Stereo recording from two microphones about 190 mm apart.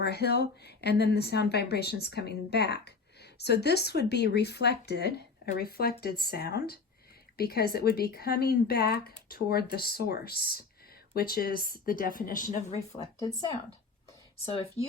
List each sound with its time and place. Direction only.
0.0 s a woman's voice: 60° left (ahead or behind); by 13.1 s 40° left (ahead or behind)
14.3 s speech: 30° left (ahead or behind)